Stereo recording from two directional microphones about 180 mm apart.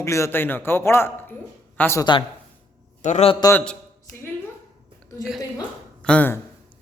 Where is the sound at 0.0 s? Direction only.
15° left (ahead or behind).